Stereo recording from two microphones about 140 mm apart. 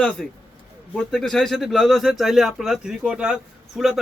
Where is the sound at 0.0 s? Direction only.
10° left (ahead or behind).